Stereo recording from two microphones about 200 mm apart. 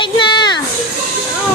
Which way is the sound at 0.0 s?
25° left (ahead or behind).